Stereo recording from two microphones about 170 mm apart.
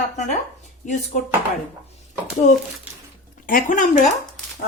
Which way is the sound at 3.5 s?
50° left (ahead or behind).